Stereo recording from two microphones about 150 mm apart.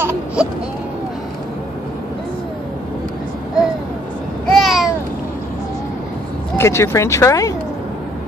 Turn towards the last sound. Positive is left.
turn(degrees=20)  # may be behind; listen again after turning